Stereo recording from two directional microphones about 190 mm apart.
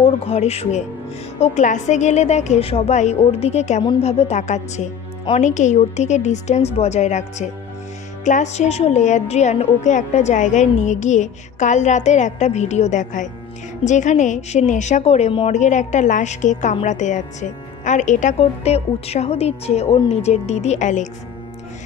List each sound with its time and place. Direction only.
0.0 s a woman's voice: 30° left (ahead or behind)